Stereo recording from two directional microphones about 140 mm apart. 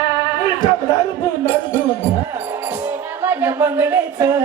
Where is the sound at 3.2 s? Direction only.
15° right (ahead or behind).